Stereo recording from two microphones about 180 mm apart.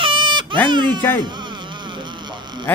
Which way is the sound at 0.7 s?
25° right (ahead or behind).